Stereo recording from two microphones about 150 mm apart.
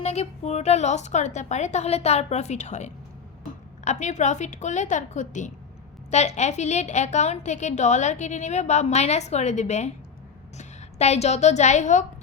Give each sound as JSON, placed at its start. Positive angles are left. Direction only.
{"t": 0.0, "sound": "a woman's voice", "side_deg": 45}